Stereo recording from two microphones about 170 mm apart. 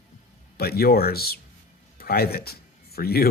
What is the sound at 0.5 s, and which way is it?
Speech, 65° left (ahead or behind).